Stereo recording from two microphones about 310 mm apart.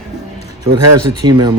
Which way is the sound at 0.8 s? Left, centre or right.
Right.